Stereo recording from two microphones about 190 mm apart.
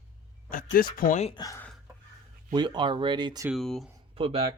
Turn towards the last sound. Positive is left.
turn(degrees=-30)  # may be behind; listen again after turning